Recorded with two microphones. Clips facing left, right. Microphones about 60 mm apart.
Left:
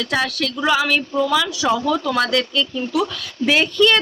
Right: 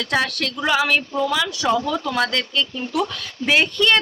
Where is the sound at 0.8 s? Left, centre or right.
Right.